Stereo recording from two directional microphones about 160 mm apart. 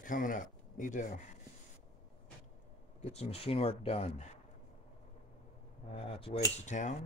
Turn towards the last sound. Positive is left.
turn(degrees=50)  # may be behind; listen again after turning